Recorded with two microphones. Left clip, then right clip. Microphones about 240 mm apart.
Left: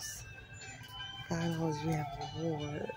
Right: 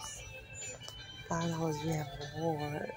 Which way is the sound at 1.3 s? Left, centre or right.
Centre.